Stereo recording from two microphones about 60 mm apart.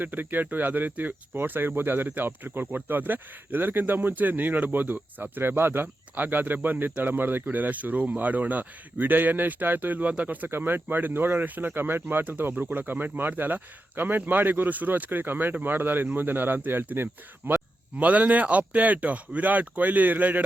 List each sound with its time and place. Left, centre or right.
0.0 s speech: right
10.5 s speech: right